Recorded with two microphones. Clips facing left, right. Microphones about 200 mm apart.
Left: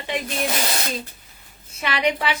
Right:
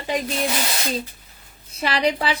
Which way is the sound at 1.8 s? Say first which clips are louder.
Right 2 dB; 35° right (ahead or behind).